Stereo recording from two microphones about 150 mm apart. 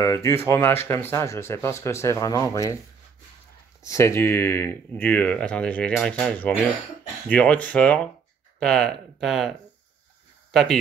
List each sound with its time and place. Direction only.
0.0 s speech: 20° left (ahead or behind)
3.8 s speech: 20° left (ahead or behind); by 10.8 s centre (ahead or behind)